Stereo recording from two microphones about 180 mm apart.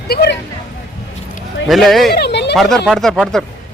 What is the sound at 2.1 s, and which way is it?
Speech, 65° left (ahead or behind).